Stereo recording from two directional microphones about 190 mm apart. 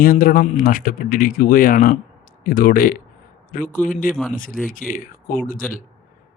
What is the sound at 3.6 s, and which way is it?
Speech, 10° left (ahead or behind).